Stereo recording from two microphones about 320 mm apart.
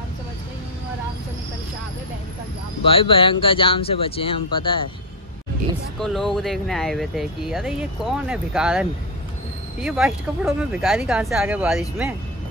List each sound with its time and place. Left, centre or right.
2.8 s speech: centre
5.9 s speech: centre